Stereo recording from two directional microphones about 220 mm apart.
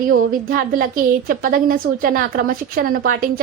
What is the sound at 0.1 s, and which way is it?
A woman's voice, 40° right (ahead or behind).